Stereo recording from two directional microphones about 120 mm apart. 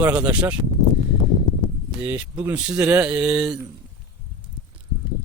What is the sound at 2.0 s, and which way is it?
Speech, 15° right (ahead or behind).